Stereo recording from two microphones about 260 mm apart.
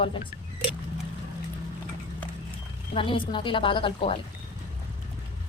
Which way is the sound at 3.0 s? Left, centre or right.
Centre.